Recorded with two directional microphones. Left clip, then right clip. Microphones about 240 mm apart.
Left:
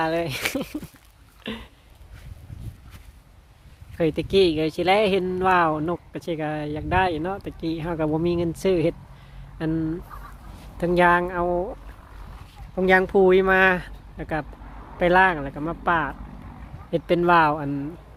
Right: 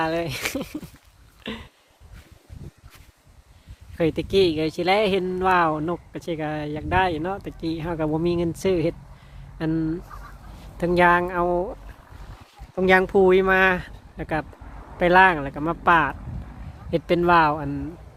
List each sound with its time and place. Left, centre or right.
0.0 s speech: centre
1.5 s a sound: centre
3.9 s speech: centre
10.1 s speech: centre
14.2 s speech: centre
14.7 s vehicle: left
14.9 s speech: centre